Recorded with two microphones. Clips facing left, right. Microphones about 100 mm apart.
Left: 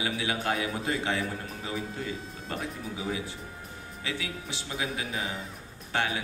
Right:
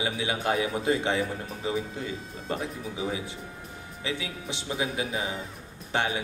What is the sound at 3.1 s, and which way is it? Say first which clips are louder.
A man's voice: right 1 dB; 25° right (ahead or behind).